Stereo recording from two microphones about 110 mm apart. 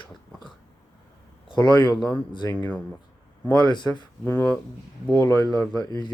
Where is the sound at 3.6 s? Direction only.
45° left (ahead or behind).